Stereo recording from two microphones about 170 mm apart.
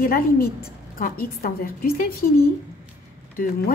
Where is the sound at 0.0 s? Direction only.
60° left (ahead or behind).